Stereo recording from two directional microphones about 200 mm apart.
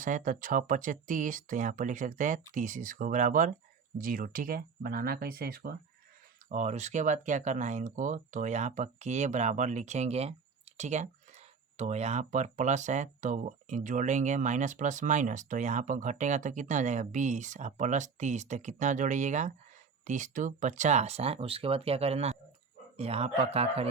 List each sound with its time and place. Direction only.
0.0 s speech: 40° right (ahead or behind)
6.5 s speech: 35° right (ahead or behind)